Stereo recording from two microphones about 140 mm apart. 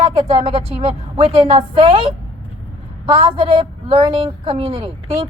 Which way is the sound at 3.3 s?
45° right (ahead or behind).